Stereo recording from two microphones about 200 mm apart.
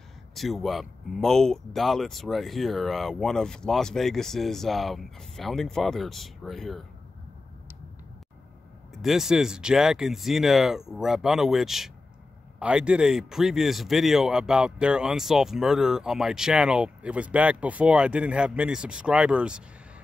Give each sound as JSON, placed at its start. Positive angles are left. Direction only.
{"t": 0.3, "sound": "speech", "side_deg": 0}
{"t": 9.0, "sound": "speech", "side_deg": 0}